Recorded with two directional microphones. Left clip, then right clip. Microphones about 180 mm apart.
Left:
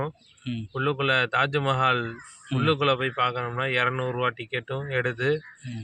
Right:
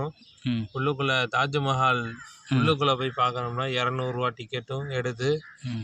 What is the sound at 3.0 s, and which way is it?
Speech, 10° right (ahead or behind).